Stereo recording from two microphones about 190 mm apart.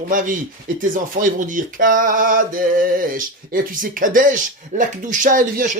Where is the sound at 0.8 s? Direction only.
45° right (ahead or behind).